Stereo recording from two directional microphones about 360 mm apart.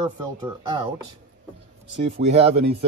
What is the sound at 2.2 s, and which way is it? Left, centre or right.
Speech, centre.